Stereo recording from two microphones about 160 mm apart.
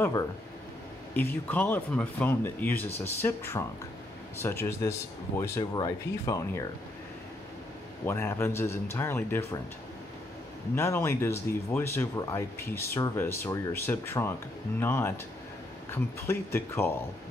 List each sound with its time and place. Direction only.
0.0 s speech: 20° left (ahead or behind)
8.0 s speech: 15° left (ahead or behind)
10.7 s speech: 15° left (ahead or behind)